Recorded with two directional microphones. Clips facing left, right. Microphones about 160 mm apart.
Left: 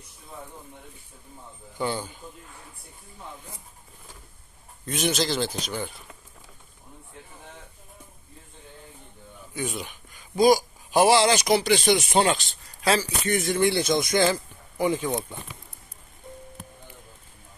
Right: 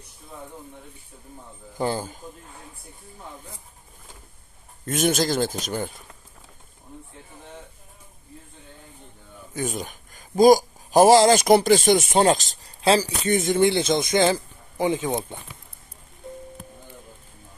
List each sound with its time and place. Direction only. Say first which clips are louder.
1.8 s speech: right 3 dB; 40° right (ahead or behind)
4.9 s speech: right 4 dB; 50° right (ahead or behind)
9.6 s speech: right 3 dB; 45° right (ahead or behind)
12.8 s speech: right 4 dB; 30° right (ahead or behind)